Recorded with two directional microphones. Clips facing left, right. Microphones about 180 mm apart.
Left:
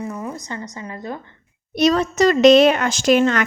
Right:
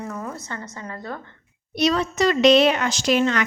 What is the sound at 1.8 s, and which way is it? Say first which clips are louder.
A woman's voice: left 4 dB; 45° left (ahead or behind).